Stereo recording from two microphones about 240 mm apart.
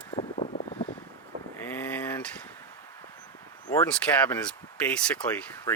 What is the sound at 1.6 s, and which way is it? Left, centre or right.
Vehicle, centre.